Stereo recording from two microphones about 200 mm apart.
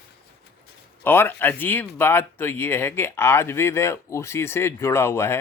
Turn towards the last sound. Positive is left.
turn(degrees=15)  # may be behind; listen again after turning